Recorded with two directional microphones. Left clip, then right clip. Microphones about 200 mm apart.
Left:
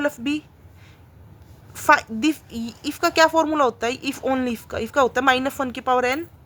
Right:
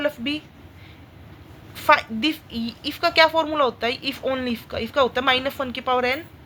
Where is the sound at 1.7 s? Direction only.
40° left (ahead or behind).